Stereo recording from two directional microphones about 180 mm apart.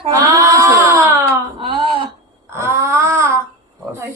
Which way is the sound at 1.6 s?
30° right (ahead or behind).